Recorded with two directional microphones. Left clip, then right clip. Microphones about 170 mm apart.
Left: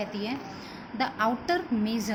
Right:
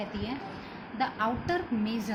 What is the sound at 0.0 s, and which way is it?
A woman's voice, 40° left (ahead or behind).